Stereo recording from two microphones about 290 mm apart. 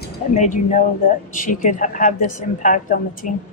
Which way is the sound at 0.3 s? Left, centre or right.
Left.